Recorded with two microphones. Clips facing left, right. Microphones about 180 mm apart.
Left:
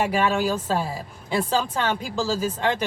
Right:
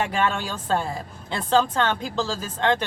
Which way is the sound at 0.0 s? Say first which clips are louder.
Left 3 dB; 10° left (ahead or behind).